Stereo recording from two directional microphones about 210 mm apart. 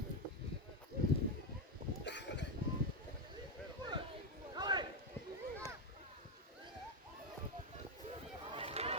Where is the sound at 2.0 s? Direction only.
55° left (ahead or behind).